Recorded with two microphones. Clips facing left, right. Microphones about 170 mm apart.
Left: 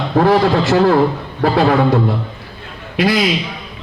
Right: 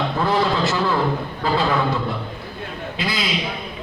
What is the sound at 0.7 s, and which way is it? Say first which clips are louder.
A man's voice: left 8 dB; 60° left (ahead or behind).